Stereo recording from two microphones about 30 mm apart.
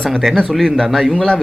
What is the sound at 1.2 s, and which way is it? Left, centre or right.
Speech, left.